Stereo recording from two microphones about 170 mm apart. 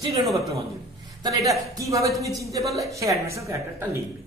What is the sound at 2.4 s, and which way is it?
Speech, 20° right (ahead or behind).